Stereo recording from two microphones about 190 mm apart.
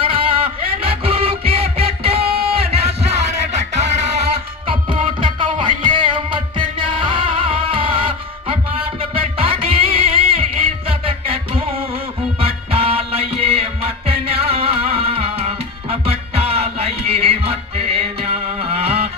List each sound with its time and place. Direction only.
0.0 s music: 30° right (ahead or behind)